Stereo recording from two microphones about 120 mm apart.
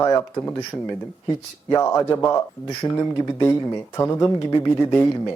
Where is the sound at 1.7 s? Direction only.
25° left (ahead or behind).